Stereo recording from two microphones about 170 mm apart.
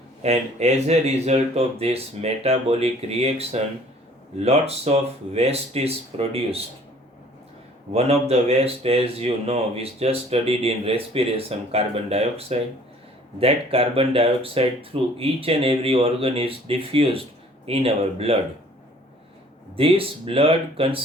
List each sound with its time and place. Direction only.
0.2 s speech: 40° right (ahead or behind)
7.9 s speech: 35° right (ahead or behind)
19.7 s speech: 35° right (ahead or behind)